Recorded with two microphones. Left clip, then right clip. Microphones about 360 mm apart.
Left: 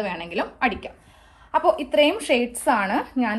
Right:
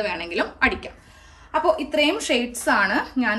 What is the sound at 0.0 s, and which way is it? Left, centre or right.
A woman's voice, centre.